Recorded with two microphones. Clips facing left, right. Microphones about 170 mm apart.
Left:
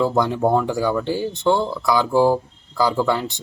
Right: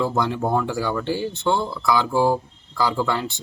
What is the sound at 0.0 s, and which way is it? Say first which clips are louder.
Speech: left 4 dB; 15° left (ahead or behind).